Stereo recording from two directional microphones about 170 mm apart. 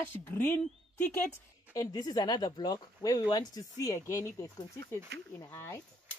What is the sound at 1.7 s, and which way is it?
Speech, 20° left (ahead or behind).